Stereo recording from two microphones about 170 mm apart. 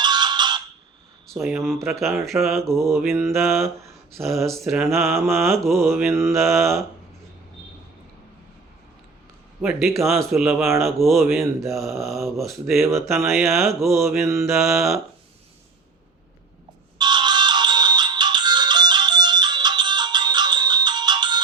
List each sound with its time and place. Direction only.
0.0 s ringtone: 25° right (ahead or behind)
1.3 s mantra: centre (ahead or behind)
2.9 s mantra: 10° right (ahead or behind)
3.2 s mantra: centre (ahead or behind)
6.1 s mantra: 15° right (ahead or behind)
6.4 s mantra: centre (ahead or behind)
9.6 s mantra: centre (ahead or behind)
13.9 s mantra: 15° right (ahead or behind)
14.5 s mantra: centre (ahead or behind)
17.0 s music: 25° right (ahead or behind)